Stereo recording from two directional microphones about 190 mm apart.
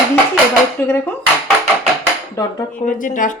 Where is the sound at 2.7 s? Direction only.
45° left (ahead or behind).